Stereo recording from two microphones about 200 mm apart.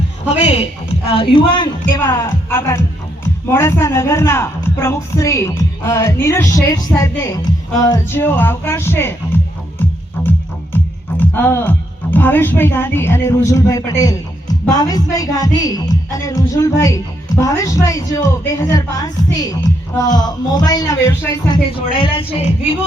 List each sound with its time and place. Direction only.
0.3 s a man's voice: 30° left (ahead or behind); by 9.1 s 10° left (ahead or behind)
10.2 s music: 10° left (ahead or behind)
11.3 s speech: 10° left (ahead or behind); by 22.7 s 25° left (ahead or behind)